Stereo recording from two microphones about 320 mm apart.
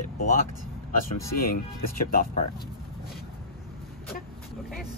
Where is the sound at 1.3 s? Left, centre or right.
Left.